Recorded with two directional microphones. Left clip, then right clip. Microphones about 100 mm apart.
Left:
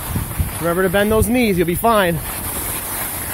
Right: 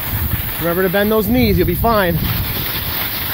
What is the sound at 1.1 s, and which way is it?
Speech, 15° right (ahead or behind).